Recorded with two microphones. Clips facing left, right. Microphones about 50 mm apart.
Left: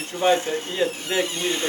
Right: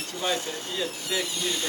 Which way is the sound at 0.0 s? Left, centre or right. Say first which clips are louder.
Left 9 dB; left.